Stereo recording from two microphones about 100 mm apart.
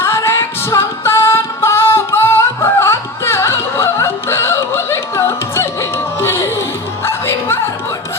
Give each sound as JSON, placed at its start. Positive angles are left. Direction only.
{"t": 0.0, "sound": "music", "side_deg": 25}